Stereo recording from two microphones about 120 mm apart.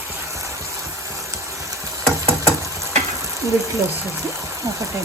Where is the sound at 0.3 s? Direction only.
25° right (ahead or behind).